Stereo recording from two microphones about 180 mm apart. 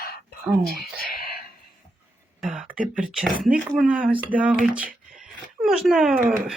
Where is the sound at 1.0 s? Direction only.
55° left (ahead or behind).